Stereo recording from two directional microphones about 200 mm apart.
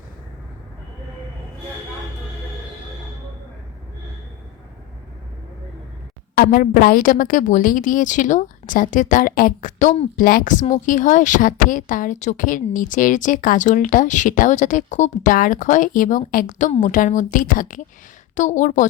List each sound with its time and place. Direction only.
6.3 s a woman's voice: 50° left (ahead or behind)